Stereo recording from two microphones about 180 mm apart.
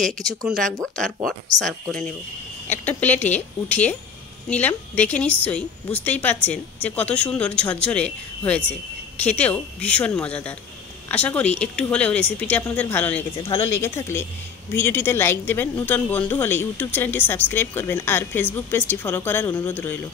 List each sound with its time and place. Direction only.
0.2 s speech: 20° right (ahead or behind)
0.5 s speech: centre (ahead or behind)